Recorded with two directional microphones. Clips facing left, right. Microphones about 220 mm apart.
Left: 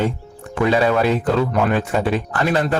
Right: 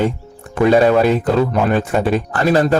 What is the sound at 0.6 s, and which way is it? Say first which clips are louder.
A man's voice: right 5 dB; 40° right (ahead or behind).